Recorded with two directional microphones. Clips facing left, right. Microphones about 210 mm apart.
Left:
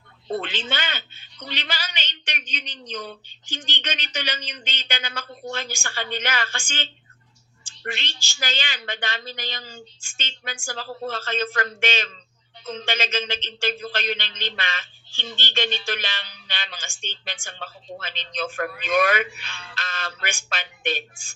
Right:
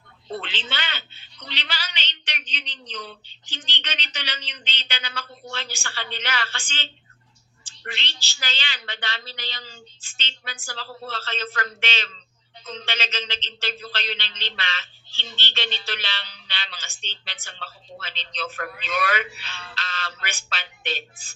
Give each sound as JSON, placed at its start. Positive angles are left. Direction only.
{"t": 0.3, "sound": "speech", "side_deg": 45}
{"t": 7.6, "sound": "a sound", "side_deg": 45}
{"t": 8.3, "sound": "speech", "side_deg": 45}
{"t": 11.6, "sound": "speech", "side_deg": 45}
{"t": 19.7, "sound": "a sound", "side_deg": 50}
{"t": 20.5, "sound": "speech", "side_deg": 50}
{"t": 20.9, "sound": "speech", "side_deg": 15}